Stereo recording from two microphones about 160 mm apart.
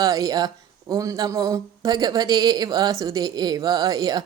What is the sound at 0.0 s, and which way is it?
A man's voice, 20° right (ahead or behind).